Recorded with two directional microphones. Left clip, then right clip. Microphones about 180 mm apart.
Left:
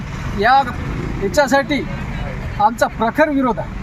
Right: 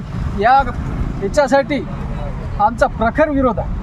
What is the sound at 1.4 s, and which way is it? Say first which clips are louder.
Speech: right 1 dB; 10° right (ahead or behind).